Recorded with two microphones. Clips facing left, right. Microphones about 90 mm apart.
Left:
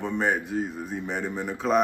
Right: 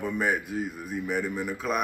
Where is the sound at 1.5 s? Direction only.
5° right (ahead or behind).